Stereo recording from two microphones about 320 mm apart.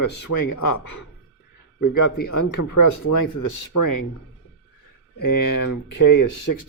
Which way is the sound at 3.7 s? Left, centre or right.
Left.